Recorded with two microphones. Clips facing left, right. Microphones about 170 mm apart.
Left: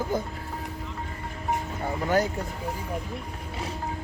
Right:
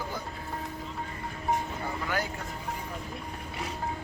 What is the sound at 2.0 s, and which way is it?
Speech, 30° left (ahead or behind).